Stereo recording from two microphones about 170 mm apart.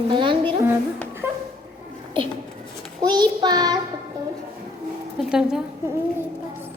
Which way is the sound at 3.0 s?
25° right (ahead or behind).